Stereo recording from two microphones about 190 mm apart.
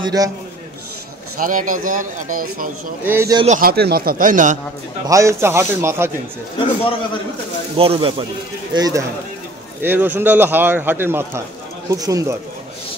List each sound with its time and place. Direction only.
0.0 s speech: 20° right (ahead or behind)
1.4 s speech: 45° right (ahead or behind)
3.0 s a man's voice: 10° right (ahead or behind)
3.4 s speech: 45° right (ahead or behind)
5.0 s a man's voice: 15° right (ahead or behind)
7.7 s speech: 30° right (ahead or behind)
8.7 s a man's voice: 20° right (ahead or behind)